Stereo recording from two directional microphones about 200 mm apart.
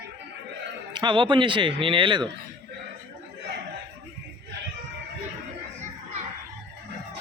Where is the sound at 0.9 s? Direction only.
25° right (ahead or behind).